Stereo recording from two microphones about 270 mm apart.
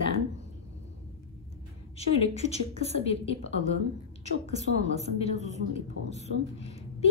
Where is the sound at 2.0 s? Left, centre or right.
Left.